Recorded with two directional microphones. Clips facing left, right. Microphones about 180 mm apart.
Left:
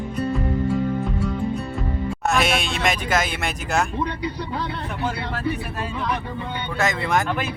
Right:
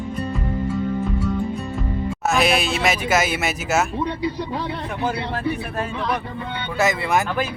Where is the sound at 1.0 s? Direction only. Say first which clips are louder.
Right 2 dB; centre (ahead or behind).